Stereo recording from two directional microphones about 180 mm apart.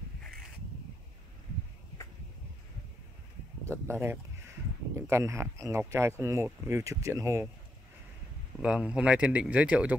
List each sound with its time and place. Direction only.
3.7 s speech: 15° right (ahead or behind)
8.5 s speech: 5° right (ahead or behind)